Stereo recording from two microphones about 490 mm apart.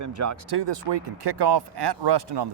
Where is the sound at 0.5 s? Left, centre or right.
Right.